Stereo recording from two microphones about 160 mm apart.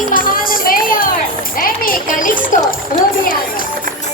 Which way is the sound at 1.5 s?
60° left (ahead or behind).